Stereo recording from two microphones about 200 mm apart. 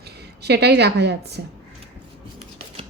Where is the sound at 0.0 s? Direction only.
55° right (ahead or behind).